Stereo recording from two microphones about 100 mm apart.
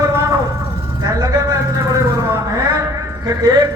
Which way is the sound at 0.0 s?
30° right (ahead or behind).